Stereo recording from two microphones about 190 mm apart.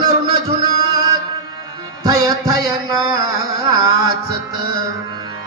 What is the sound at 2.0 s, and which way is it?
Music, 20° right (ahead or behind).